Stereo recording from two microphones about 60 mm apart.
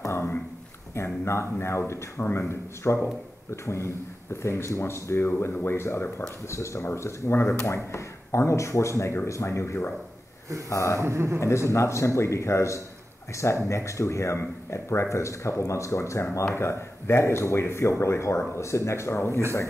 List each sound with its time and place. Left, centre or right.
0.0 s a sound: left
0.9 s speech: left
6.4 s speech: left
10.7 s speech: left
11.0 s a man's voice: right
11.7 s speech: left